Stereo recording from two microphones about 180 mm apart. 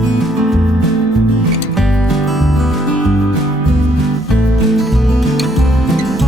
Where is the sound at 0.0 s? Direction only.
Centre (ahead or behind).